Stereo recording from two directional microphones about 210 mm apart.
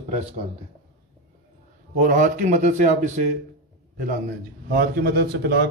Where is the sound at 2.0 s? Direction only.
40° right (ahead or behind).